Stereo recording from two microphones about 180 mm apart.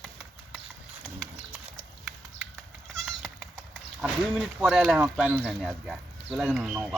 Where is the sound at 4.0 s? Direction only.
Centre (ahead or behind).